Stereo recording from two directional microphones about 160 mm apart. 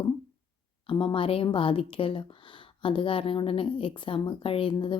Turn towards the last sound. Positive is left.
turn(degrees=30)  # may be behind; listen again after turning